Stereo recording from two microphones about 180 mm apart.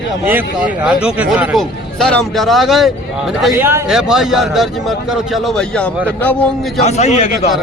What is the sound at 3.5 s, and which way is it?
Speech, 15° right (ahead or behind).